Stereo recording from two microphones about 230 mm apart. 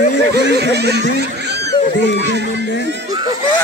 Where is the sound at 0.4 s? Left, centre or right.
Right.